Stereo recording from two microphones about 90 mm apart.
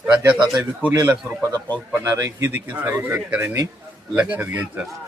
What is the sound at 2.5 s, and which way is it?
A man's voice, 20° right (ahead or behind).